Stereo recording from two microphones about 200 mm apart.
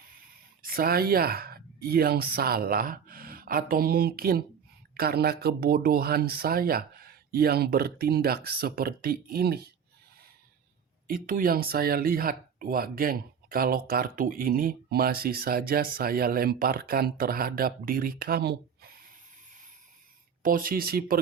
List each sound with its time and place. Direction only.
0.6 s speech: 50° right (ahead or behind)
11.1 s speech: 45° right (ahead or behind)
20.4 s speech: 45° right (ahead or behind)